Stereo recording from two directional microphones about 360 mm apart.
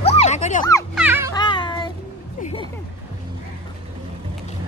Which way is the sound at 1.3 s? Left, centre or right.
Centre.